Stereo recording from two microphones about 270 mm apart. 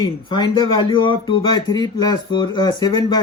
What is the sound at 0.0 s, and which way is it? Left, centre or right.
Speech, centre.